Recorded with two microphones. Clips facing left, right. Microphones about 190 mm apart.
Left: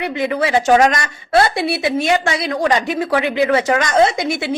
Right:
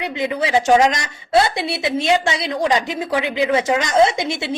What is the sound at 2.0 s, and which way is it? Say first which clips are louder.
A woman's voice: left 1 dB; 25° right (ahead or behind).